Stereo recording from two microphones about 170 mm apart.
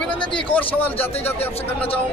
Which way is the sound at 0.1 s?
30° left (ahead or behind).